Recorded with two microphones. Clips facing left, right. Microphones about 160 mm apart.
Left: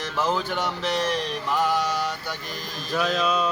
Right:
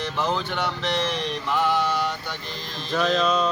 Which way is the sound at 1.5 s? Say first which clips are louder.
Right 1 dB; 40° left (ahead or behind).